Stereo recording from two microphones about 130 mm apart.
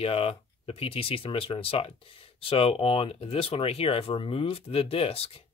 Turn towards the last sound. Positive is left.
turn(degrees=50)  # may be behind; listen again after turning